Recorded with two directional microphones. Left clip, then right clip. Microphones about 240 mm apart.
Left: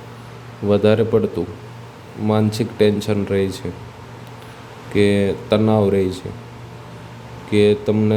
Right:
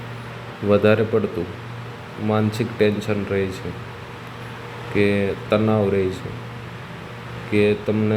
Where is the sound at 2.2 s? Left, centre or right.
Centre.